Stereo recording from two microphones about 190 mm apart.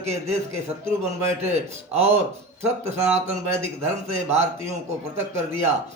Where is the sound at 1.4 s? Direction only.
35° right (ahead or behind).